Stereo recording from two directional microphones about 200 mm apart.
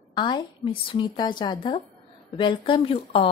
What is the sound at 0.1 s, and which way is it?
Speech, 25° left (ahead or behind).